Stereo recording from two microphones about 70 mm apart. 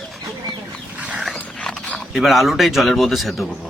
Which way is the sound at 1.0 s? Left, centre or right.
Centre.